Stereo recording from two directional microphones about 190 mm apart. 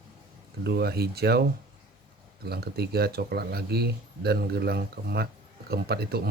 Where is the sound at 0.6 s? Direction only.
55° right (ahead or behind).